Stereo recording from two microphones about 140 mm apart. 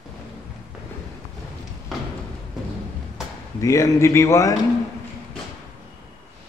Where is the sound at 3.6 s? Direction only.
20° left (ahead or behind).